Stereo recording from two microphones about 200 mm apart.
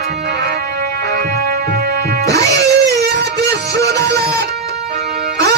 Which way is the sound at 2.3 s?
15° left (ahead or behind).